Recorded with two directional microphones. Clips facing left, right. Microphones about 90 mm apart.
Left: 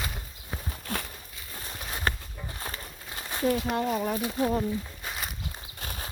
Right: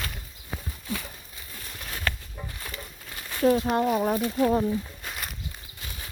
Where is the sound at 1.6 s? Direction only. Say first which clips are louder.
Left 2 dB; 35° left (ahead or behind).